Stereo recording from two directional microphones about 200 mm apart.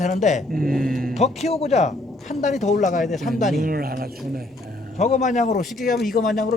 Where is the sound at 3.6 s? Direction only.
45° right (ahead or behind).